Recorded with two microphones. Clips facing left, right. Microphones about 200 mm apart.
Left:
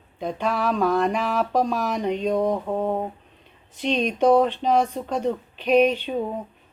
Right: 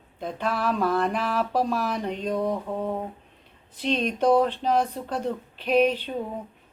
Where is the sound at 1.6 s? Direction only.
40° left (ahead or behind).